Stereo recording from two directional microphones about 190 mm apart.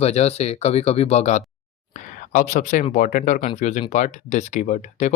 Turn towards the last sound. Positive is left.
turn(degrees=40)  # may be behind; listen again after turning